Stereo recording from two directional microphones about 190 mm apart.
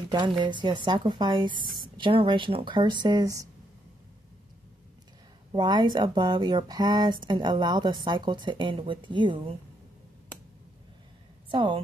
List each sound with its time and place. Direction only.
0.1 s speech: 25° right (ahead or behind)
5.5 s speech: 25° right (ahead or behind)
11.5 s speech: 25° right (ahead or behind)